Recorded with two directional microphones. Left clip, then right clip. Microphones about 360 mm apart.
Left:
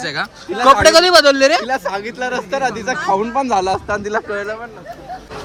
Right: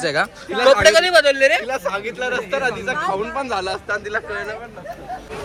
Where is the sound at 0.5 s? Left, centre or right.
Centre.